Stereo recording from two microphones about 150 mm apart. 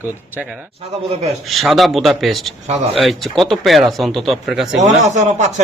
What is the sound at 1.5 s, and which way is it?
Speech, centre (ahead or behind).